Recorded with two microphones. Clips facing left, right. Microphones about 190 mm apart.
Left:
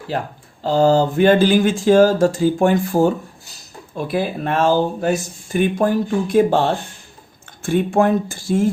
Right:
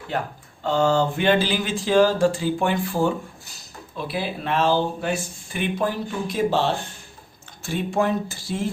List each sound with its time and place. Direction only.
0.1 s speech: 30° left (ahead or behind); by 8.7 s 50° left (ahead or behind)